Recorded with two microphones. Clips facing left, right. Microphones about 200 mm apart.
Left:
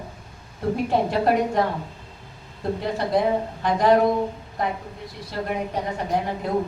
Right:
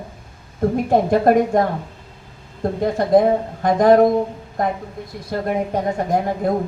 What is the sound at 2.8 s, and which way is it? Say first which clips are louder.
A woman's voice: right 8 dB; 45° right (ahead or behind).